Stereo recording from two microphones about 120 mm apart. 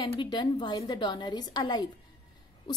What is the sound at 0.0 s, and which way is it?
Speech, 40° left (ahead or behind).